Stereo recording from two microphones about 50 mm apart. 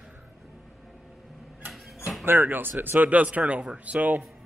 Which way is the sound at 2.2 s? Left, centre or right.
Right.